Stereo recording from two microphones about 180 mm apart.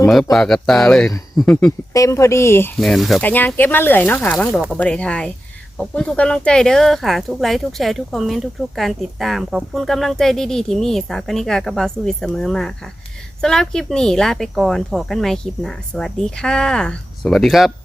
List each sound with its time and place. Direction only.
0.1 s speech: centre (ahead or behind)
1.9 s speech: 15° left (ahead or behind)
2.7 s speech: centre (ahead or behind)